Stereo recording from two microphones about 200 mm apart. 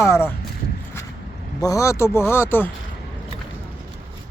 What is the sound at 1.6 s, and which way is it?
Speech, 15° left (ahead or behind).